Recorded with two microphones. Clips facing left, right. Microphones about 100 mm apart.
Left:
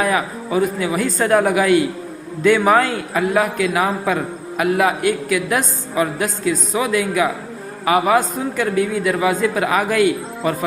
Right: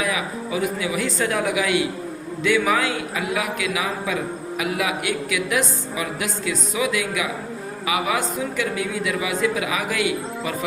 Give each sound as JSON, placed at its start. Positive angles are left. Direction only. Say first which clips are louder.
{"t": 0.0, "sound": "a man's voice", "louder": "left 6 dB", "side_deg": 45}